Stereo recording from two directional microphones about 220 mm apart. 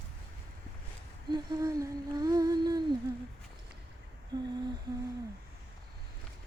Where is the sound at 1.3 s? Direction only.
15° right (ahead or behind).